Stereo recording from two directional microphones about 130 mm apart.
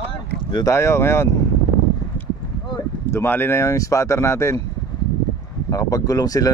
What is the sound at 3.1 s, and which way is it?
Speech, 20° left (ahead or behind).